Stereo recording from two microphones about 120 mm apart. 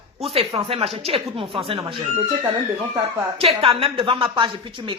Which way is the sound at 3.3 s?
50° right (ahead or behind).